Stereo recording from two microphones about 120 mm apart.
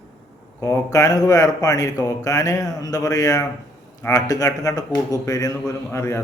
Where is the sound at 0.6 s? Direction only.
25° left (ahead or behind).